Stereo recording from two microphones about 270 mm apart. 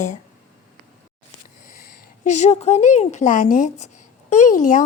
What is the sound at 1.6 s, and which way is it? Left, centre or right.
A woman's voice, left.